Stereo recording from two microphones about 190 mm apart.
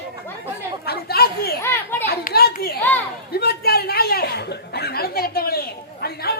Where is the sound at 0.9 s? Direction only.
55° left (ahead or behind).